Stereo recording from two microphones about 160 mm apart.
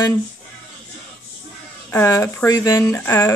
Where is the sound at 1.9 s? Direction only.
15° left (ahead or behind).